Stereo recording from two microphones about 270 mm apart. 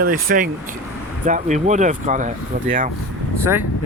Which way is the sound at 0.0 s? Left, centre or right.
Right.